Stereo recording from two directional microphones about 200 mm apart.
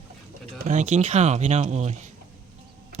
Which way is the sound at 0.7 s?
35° right (ahead or behind).